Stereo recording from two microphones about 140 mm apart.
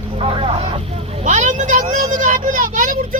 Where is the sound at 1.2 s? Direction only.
60° right (ahead or behind).